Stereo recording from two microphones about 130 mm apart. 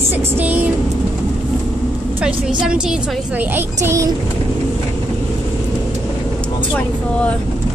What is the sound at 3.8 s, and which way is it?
Speech, 25° right (ahead or behind).